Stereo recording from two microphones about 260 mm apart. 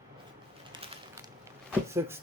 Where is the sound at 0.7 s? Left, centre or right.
Centre.